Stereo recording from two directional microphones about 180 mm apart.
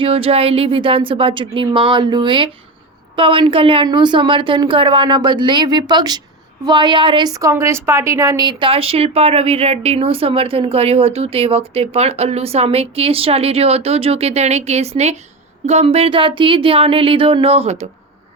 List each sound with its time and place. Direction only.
0.0 s a woman's voice: 30° right (ahead or behind)